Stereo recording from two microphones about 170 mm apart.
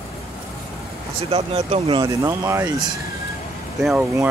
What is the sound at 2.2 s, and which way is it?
Speech, 15° right (ahead or behind).